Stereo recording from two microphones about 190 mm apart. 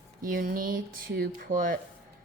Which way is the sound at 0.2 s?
45° right (ahead or behind).